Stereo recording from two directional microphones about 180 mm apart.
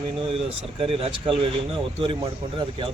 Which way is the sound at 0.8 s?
30° right (ahead or behind).